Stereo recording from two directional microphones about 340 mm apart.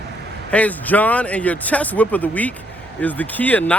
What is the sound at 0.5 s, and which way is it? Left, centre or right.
Speech, centre.